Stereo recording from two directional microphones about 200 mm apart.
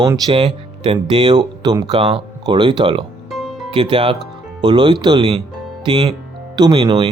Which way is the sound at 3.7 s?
25° right (ahead or behind).